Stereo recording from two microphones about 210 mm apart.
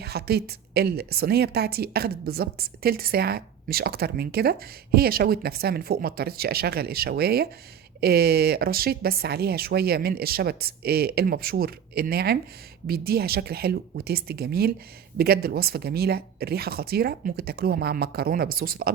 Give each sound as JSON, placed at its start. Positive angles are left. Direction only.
{"t": 0.0, "sound": "a woman's voice", "side_deg": -50}